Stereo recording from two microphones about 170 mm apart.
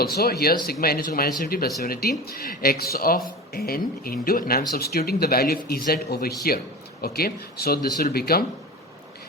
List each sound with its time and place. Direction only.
0.0 s speech: 65° left (ahead or behind)